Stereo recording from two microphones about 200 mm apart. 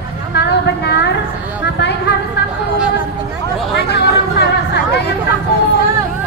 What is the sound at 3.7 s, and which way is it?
Chatter, 55° left (ahead or behind).